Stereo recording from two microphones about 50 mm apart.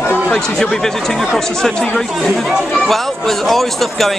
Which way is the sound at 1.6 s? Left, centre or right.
Centre.